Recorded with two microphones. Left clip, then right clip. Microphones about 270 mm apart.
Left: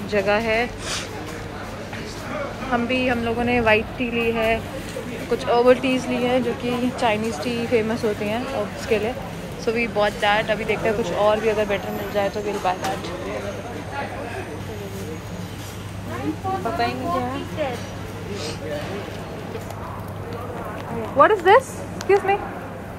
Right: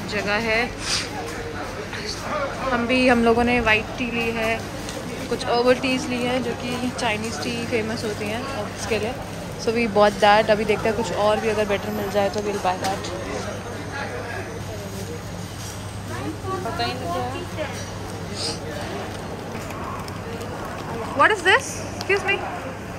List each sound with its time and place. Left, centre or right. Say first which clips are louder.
0.1 s speech: left 2 dB; centre
2.7 s speech: right 3 dB; centre
21.2 s speech: left 3 dB; centre